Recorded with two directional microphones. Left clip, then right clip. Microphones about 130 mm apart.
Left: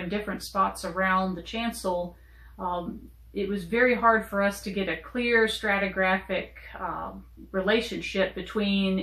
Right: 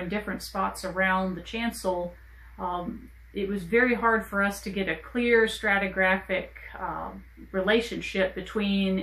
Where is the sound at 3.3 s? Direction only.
25° right (ahead or behind).